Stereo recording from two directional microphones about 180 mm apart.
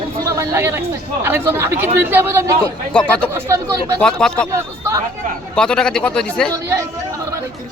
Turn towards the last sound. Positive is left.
turn(degrees=5)  # may be behind; listen again after turning